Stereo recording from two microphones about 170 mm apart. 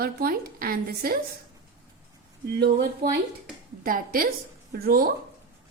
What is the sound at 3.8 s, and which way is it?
A woman's voice, 55° right (ahead or behind).